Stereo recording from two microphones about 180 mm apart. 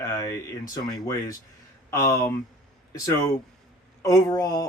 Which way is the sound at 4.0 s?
20° left (ahead or behind).